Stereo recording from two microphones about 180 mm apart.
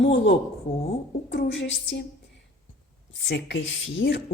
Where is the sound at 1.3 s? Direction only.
85° left.